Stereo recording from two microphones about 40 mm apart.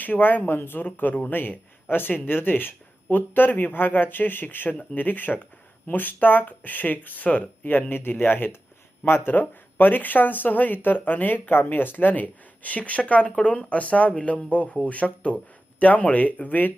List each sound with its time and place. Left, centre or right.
0.0 s speech: left
11.3 s speech: left